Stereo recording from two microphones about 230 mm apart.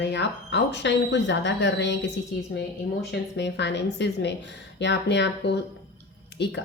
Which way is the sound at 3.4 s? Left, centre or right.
Left.